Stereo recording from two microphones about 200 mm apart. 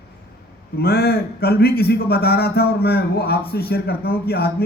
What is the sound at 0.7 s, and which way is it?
A man's voice, 50° left (ahead or behind).